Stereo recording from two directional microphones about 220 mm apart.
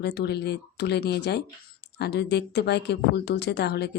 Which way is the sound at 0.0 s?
50° left (ahead or behind).